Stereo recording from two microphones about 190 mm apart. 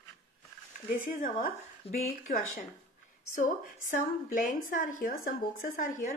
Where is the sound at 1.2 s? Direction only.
45° left (ahead or behind).